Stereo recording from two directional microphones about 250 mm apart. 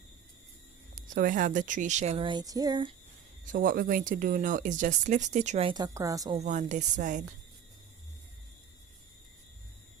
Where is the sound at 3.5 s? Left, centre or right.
Right; by 6.4 s centre.